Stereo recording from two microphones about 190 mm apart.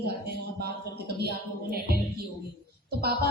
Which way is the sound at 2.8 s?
55° right (ahead or behind).